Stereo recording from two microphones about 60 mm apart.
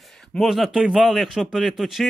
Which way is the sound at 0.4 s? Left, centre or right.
Centre.